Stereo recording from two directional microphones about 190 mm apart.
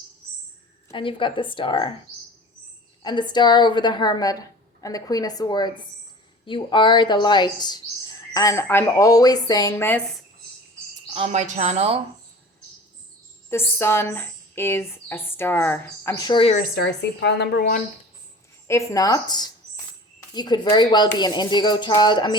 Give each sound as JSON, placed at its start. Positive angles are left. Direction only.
{"t": 0.9, "sound": "a woman's voice", "side_deg": 25}
{"t": 3.0, "sound": "a woman's voice", "side_deg": 25}
{"t": 11.1, "sound": "a woman's voice", "side_deg": -35}
{"t": 13.5, "sound": "speech", "side_deg": 10}
{"t": 16.6, "sound": "a woman's voice", "side_deg": 55}
{"t": 18.7, "sound": "a woman's voice", "side_deg": 15}